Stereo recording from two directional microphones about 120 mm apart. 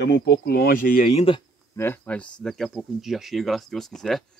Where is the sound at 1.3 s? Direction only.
45° left (ahead or behind).